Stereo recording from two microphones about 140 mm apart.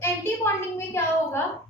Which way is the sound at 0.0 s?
15° left (ahead or behind).